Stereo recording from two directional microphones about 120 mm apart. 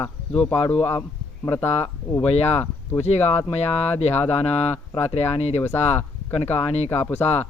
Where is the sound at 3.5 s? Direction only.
60° left (ahead or behind).